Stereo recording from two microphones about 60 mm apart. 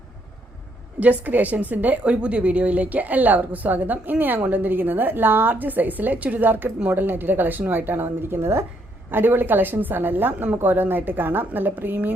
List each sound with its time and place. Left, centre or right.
0.9 s a woman's voice: right
9.1 s a woman's voice: right